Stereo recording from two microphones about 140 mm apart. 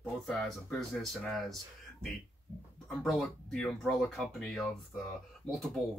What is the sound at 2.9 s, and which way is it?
Speech, centre (ahead or behind).